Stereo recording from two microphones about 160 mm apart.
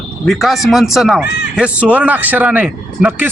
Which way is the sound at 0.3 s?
Centre (ahead or behind).